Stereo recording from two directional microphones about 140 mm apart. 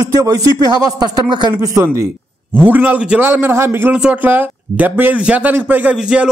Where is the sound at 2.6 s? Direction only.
10° right (ahead or behind).